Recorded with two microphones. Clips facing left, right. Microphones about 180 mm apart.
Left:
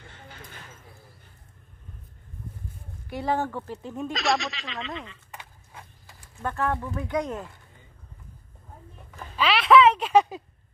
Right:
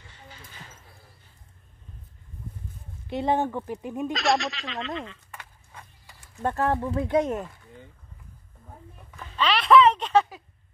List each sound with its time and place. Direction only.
0.0 s a sound: 55° left (ahead or behind)
3.1 s speech: 20° right (ahead or behind)
4.1 s speech: centre (ahead or behind)
5.7 s horse: 10° left (ahead or behind)
6.4 s speech: 30° right (ahead or behind)
9.4 s a sound: centre (ahead or behind)